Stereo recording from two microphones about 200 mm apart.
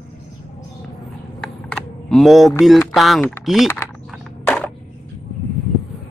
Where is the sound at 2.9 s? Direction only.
Centre (ahead or behind).